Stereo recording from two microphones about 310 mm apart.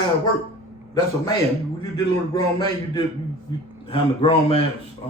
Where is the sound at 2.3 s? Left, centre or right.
Centre.